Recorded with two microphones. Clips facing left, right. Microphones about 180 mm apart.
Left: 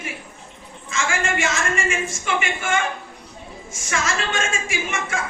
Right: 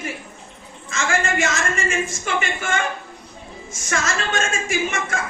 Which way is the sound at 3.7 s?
40° right (ahead or behind).